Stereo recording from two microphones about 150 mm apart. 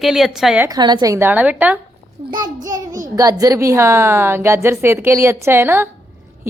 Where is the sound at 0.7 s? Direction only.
30° right (ahead or behind); by 1.8 s 10° right (ahead or behind).